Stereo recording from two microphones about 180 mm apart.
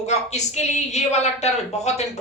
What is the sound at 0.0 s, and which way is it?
A woman's voice, 40° left (ahead or behind).